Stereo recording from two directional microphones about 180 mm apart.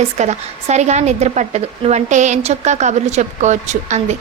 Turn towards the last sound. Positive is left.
turn(degrees=-40)  # may be behind; listen again after turning